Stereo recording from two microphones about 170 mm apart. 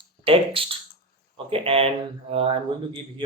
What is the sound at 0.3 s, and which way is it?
Speech, 30° right (ahead or behind).